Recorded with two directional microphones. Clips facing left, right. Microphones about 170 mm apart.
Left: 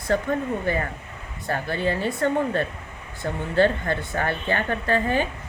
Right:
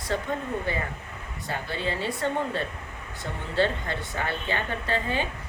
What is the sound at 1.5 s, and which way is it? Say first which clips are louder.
A woman's voice: left 6 dB; 55° left (ahead or behind).